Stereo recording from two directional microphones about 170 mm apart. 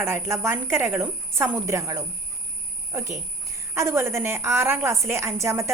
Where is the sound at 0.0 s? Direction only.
15° right (ahead or behind).